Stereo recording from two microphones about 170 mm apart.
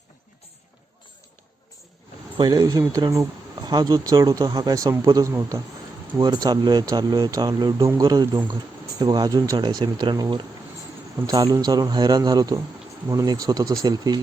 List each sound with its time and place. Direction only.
2.4 s speech: 20° right (ahead or behind)